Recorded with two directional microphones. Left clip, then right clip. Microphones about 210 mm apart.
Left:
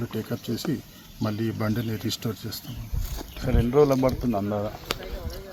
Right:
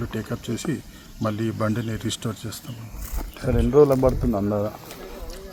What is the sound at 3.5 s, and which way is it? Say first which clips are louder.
Speech: right 4 dB; 50° right (ahead or behind).